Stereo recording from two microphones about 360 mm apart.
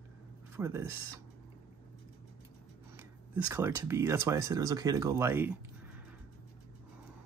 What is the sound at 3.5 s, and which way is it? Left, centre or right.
Speech, centre.